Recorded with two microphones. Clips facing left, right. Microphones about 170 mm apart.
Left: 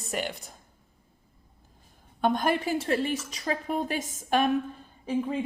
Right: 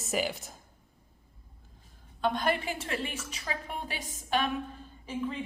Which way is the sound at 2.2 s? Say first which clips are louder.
Left 4 dB; 45° left (ahead or behind).